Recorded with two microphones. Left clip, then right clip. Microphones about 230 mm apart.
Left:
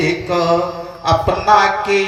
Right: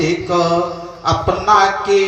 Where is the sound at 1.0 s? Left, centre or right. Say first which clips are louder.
Left 1 dB; left.